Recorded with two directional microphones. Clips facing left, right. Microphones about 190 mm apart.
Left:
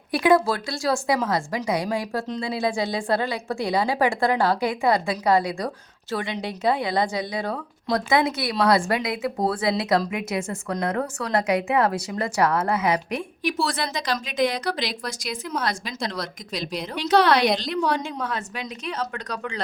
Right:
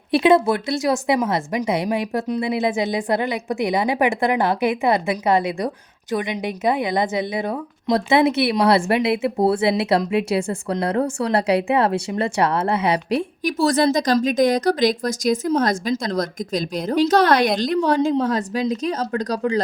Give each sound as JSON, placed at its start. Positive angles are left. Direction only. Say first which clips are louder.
{"t": 0.1, "sound": "a woman's voice", "louder": "right 4 dB", "side_deg": -25}